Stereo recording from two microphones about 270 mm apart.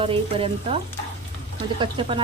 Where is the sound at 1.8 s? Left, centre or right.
Centre.